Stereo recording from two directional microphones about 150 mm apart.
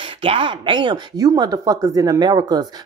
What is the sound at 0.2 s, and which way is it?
Speech, 35° right (ahead or behind).